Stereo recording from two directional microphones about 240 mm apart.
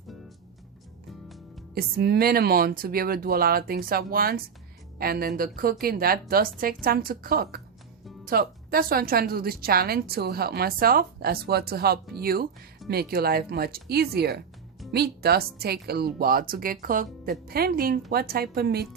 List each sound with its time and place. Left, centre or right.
1.7 s a woman's voice: right